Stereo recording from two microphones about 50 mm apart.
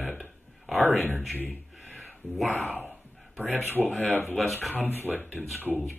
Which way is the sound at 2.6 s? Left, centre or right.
Left.